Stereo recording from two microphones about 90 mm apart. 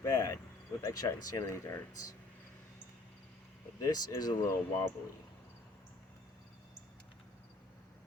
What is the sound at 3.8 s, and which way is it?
Speech, 45° left (ahead or behind).